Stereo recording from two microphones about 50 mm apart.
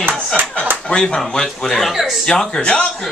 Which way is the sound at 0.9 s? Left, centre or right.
Centre.